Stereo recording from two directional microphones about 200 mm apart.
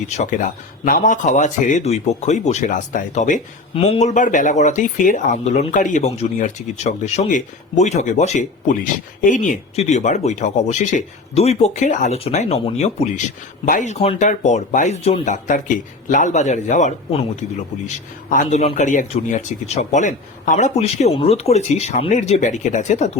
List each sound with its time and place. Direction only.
0.1 s a man's voice: 40° left (ahead or behind)